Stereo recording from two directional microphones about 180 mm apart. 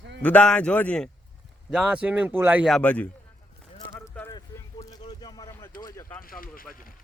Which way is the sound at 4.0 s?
20° left (ahead or behind).